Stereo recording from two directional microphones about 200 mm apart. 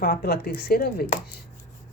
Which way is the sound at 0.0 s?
50° left (ahead or behind).